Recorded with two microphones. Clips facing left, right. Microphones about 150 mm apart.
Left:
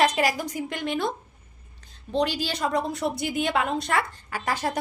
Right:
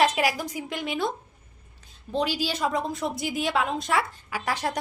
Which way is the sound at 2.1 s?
5° right (ahead or behind).